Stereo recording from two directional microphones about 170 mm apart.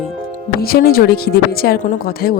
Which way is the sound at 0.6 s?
60° left (ahead or behind).